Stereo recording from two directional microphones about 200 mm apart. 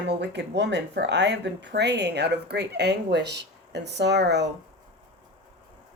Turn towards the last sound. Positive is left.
turn(degrees=-60)  # may be behind; listen again after turning